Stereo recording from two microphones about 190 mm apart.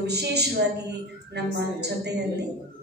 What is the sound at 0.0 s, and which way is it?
A woman's voice, 60° right (ahead or behind).